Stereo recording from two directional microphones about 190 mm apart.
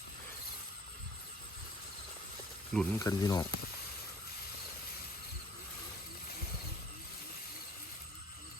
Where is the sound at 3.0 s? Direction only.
20° left (ahead or behind).